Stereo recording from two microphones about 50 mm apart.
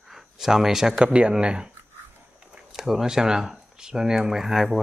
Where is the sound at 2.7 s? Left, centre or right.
Centre.